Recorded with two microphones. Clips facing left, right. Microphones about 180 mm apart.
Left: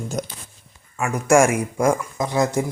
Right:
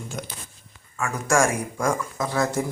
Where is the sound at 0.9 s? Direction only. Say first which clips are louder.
Left 6 dB; 20° left (ahead or behind).